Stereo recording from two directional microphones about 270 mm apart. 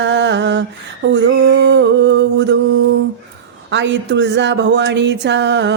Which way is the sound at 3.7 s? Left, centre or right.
Right.